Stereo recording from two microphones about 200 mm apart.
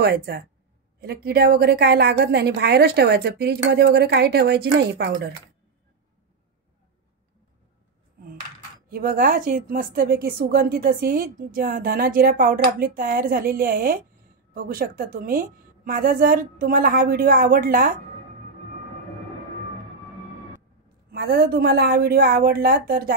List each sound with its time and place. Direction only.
0.0 s a woman's voice: 50° right (ahead or behind)
8.9 s a woman's voice: 45° right (ahead or behind)
21.1 s a woman's voice: 50° right (ahead or behind)